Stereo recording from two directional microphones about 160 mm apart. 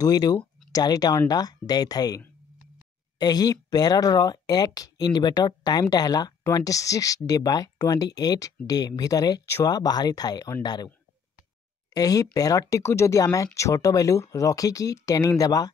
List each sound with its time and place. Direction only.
0.0 s speech: 25° left (ahead or behind)
11.9 s speech: 20° left (ahead or behind)